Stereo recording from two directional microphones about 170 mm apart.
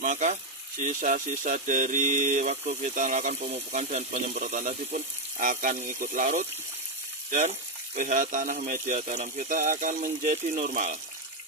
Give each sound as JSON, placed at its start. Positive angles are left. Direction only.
{"t": 0.0, "sound": "speech", "side_deg": -45}